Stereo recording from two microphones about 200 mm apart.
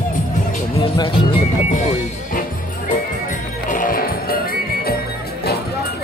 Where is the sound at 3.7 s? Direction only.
45° left (ahead or behind).